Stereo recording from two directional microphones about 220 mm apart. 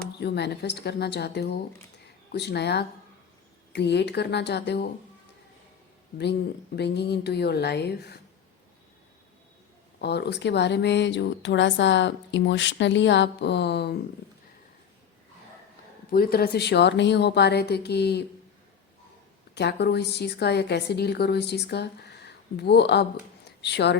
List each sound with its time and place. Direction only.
0.2 s speech: 50° left (ahead or behind)
6.7 s speech: 50° left (ahead or behind)
10.0 s speech: 50° left (ahead or behind)
16.1 s speech: 45° left (ahead or behind)
19.5 s speech: 50° left (ahead or behind)